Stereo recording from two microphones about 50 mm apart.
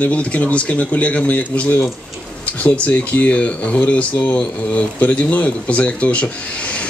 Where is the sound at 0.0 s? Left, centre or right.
Left.